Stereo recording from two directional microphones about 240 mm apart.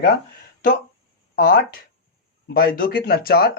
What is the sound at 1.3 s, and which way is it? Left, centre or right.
Speech, left.